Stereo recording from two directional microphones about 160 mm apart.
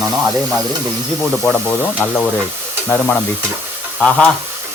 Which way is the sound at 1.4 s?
10° left (ahead or behind).